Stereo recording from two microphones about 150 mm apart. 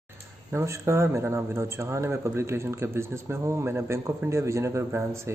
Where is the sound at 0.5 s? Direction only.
20° right (ahead or behind).